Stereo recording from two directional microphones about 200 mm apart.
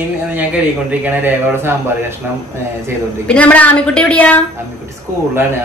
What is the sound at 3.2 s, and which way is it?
A woman's voice, 5° left (ahead or behind).